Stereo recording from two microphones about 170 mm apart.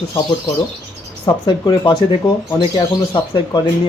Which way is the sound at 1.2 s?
25° left (ahead or behind).